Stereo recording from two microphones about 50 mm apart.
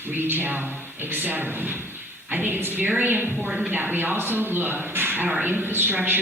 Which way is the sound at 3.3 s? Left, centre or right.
Centre.